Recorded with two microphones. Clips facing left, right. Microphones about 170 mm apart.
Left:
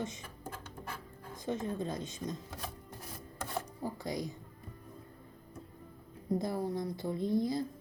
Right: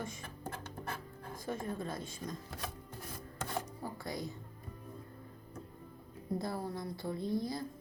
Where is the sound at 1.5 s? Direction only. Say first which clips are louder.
Left 4 dB; 20° left (ahead or behind).